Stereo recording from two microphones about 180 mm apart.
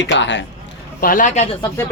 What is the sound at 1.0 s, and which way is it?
Speech, 50° left (ahead or behind).